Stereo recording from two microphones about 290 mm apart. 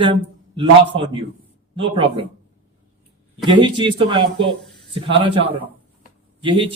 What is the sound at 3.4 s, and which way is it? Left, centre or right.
Speech, centre.